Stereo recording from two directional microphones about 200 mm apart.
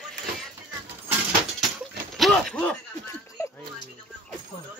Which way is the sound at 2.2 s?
Centre (ahead or behind).